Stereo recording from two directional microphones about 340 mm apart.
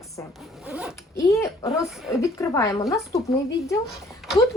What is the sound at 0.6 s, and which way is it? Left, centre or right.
Zipper, centre.